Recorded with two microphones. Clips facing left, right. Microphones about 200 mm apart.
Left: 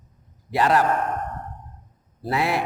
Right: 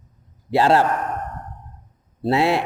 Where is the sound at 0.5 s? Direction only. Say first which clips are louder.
Right 3 dB; 30° right (ahead or behind).